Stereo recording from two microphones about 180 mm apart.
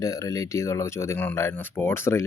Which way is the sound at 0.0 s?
20° left (ahead or behind).